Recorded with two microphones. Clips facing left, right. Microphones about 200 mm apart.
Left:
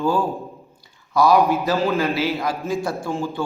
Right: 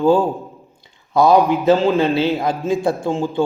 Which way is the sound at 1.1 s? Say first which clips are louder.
Right 3 dB; 20° right (ahead or behind).